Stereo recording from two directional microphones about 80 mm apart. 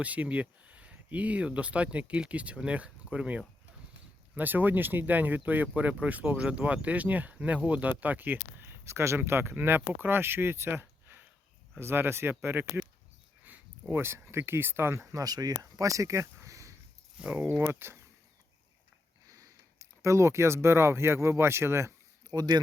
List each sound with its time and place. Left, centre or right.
0.0 s speech: centre
13.9 s speech: right
17.2 s speech: centre
17.4 s speech: right
19.3 s speech: right
22.3 s speech: right